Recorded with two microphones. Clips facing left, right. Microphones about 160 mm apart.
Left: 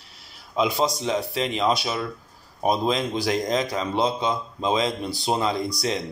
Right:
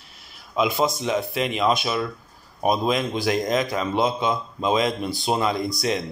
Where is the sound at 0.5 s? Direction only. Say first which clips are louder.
Right 1 dB; 30° left (ahead or behind).